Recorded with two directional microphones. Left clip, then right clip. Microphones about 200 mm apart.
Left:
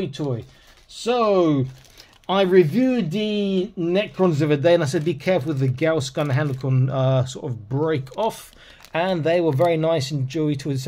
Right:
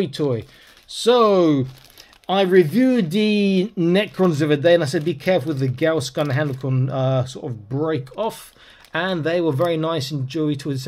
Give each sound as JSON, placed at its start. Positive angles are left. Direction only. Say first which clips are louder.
{"t": 0.0, "sound": "speech", "louder": "right 5 dB", "side_deg": -35}
{"t": 2.2, "sound": "speech", "louder": "right 1 dB", "side_deg": 0}
{"t": 2.9, "sound": "speech", "louder": "right 4 dB", "side_deg": -25}
{"t": 4.2, "sound": "speech", "louder": "even", "side_deg": -5}